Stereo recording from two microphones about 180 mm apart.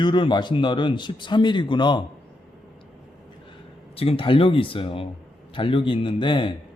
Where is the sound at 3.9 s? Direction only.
30° left (ahead or behind).